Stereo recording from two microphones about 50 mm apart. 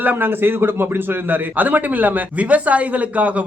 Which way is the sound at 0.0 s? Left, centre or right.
Right.